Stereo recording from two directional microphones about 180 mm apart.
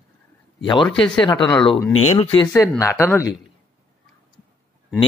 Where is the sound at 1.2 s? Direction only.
25° left (ahead or behind).